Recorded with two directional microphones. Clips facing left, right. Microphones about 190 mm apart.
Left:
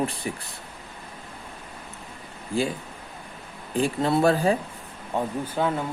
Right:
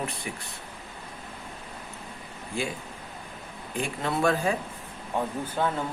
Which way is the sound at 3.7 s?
35° left (ahead or behind).